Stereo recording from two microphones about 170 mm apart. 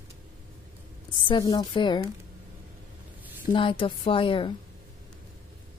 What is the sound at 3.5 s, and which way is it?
A woman's voice, 30° left (ahead or behind).